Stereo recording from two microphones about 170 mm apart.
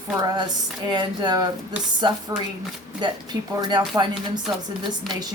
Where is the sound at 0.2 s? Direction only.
25° right (ahead or behind).